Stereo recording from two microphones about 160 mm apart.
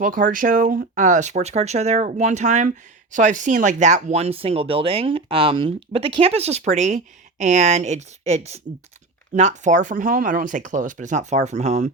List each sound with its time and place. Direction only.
0.0 s speech: 60° right (ahead or behind); by 11.9 s 45° right (ahead or behind)